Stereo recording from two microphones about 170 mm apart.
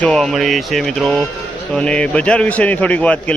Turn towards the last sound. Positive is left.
turn(degrees=10)  # may be behind; listen again after turning